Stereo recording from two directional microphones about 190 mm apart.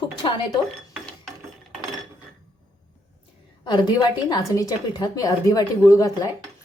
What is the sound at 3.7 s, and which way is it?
Speech, 20° left (ahead or behind).